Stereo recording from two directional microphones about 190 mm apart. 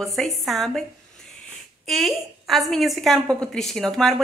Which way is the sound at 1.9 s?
Centre (ahead or behind).